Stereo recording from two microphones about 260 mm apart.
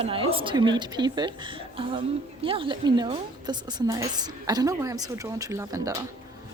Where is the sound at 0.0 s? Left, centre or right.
Right.